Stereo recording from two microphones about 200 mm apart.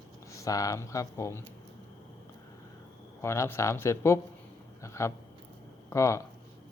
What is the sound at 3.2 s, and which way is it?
A man's voice, 15° left (ahead or behind).